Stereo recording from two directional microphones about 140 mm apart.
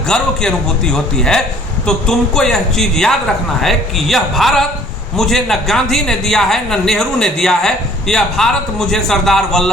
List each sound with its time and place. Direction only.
0.1 s speech: 5° left (ahead or behind)